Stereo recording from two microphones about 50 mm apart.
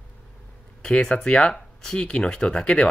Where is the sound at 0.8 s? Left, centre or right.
Centre.